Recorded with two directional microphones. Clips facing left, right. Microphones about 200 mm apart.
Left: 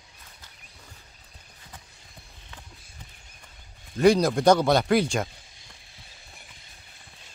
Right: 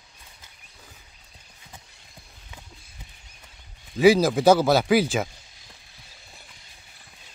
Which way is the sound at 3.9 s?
5° right (ahead or behind).